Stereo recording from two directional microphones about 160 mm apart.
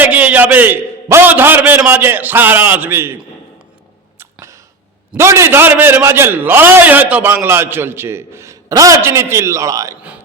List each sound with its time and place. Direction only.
0.0 s a man's voice: 10° right (ahead or behind)
4.2 s a sound: 15° right (ahead or behind)
5.1 s a man's voice: 15° right (ahead or behind)